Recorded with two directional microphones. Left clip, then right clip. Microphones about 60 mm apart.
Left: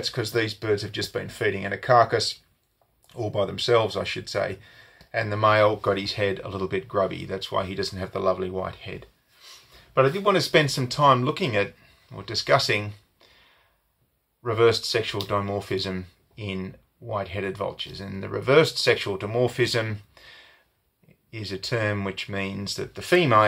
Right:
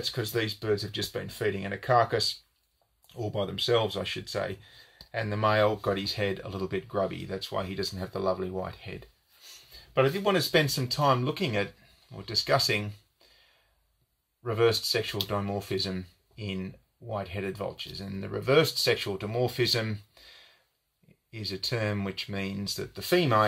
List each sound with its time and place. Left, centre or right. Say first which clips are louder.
0.1 s speech: left 5 dB; left
10.2 s speech: left 5 dB; left
14.6 s speech: left 5 dB; left
19.0 s speech: left 5 dB; left